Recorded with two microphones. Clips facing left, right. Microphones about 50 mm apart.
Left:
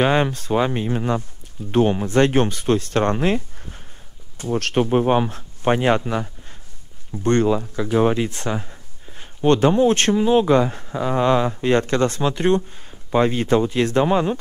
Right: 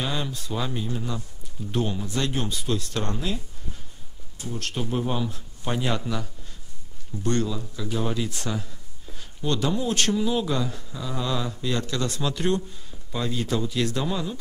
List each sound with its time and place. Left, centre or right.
0.0 s speech: left
4.8 s speech: left